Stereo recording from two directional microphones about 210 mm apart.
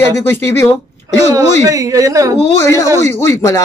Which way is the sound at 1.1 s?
15° right (ahead or behind).